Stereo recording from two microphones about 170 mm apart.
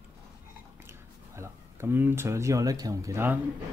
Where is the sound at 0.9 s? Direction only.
15° right (ahead or behind).